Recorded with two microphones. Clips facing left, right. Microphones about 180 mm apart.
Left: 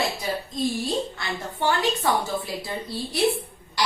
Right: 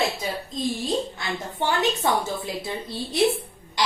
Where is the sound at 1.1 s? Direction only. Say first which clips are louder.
Right 1 dB; 20° right (ahead or behind).